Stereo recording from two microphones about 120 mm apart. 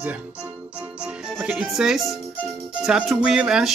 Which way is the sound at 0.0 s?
10° right (ahead or behind).